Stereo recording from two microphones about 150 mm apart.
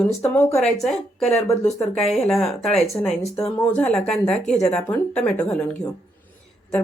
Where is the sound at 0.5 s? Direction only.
Centre (ahead or behind).